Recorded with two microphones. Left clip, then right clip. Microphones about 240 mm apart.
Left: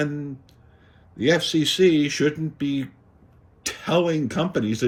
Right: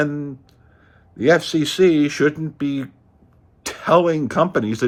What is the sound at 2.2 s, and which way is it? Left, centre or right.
Speech, centre.